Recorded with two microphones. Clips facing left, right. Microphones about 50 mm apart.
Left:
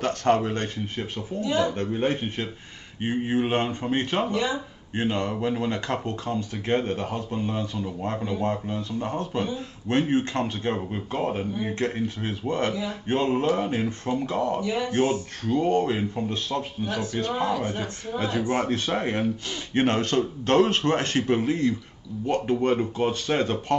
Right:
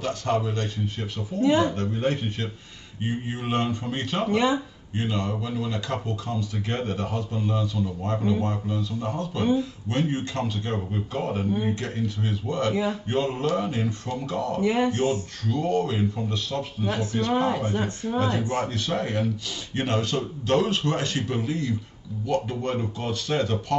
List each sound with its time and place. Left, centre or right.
0.0 s speech: left
1.4 s speech: right
1.8 s speech: left
4.3 s speech: right
4.9 s speech: left
14.6 s speech: right
14.9 s speech: left
17.4 s speech: right
18.4 s speech: left